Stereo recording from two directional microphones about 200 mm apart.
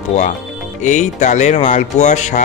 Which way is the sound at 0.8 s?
35° left (ahead or behind).